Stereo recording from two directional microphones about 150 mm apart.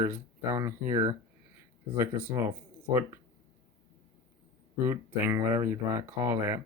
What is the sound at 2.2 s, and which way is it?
Speech, 15° right (ahead or behind).